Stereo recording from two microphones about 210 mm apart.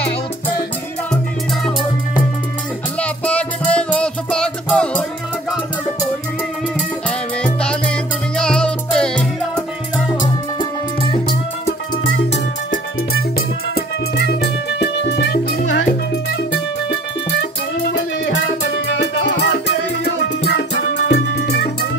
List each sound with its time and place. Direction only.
3.0 s music: 5° left (ahead or behind)
7.1 s music: 5° left (ahead or behind)
10.6 s music: 20° left (ahead or behind)
13.7 s music: 50° left (ahead or behind)
17.8 s music: 55° left (ahead or behind)